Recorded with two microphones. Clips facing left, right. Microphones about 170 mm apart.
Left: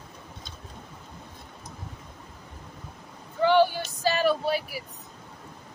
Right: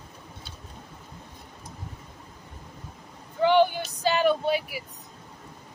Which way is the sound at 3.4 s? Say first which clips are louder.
Even; 15° right (ahead or behind).